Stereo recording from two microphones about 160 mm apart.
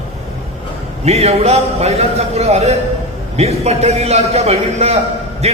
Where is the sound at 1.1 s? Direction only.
40° right (ahead or behind).